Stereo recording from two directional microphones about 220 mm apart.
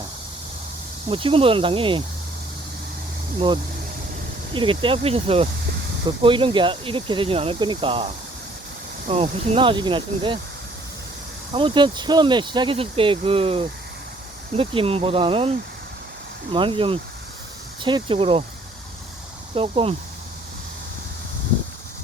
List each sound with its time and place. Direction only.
1.0 s speech: 25° right (ahead or behind)
3.3 s speech: 20° right (ahead or behind)
11.5 s speech: 20° right (ahead or behind)
19.5 s speech: 25° right (ahead or behind)